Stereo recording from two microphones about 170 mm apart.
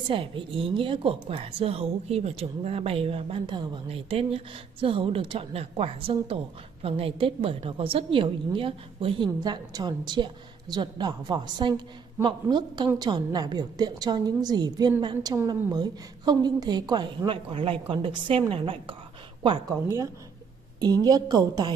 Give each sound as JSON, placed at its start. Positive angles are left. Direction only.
{"t": 0.1, "sound": "a woman's voice", "side_deg": -30}
{"t": 19.7, "sound": "a woman's voice", "side_deg": -15}